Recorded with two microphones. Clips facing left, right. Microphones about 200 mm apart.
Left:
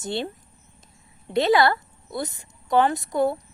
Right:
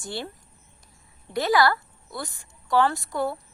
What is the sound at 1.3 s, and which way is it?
A woman's voice, 25° left (ahead or behind).